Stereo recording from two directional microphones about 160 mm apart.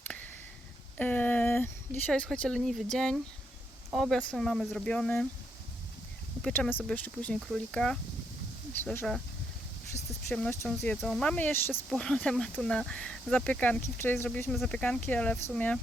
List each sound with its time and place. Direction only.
0.0 s a sound: 10° left (ahead or behind)
0.9 s speech: 10° left (ahead or behind)
6.4 s speech: 10° left (ahead or behind)
10.5 s speech: 15° left (ahead or behind)
10.9 s speech: centre (ahead or behind)